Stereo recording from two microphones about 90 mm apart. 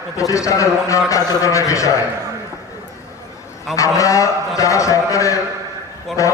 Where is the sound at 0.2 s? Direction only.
35° left (ahead or behind).